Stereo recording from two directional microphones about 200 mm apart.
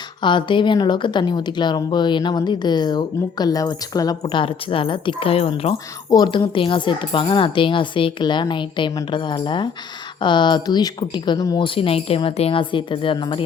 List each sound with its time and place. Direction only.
0.2 s speech: 25° left (ahead or behind)